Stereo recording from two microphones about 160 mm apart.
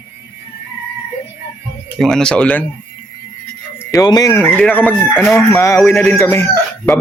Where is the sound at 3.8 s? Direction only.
20° left (ahead or behind).